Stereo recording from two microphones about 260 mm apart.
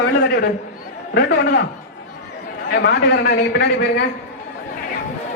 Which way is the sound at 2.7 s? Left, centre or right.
Left.